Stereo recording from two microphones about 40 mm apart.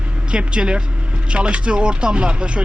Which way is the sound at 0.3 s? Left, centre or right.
Right.